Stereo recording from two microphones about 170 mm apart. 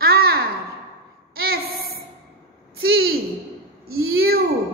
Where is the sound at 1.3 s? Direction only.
65° right (ahead or behind).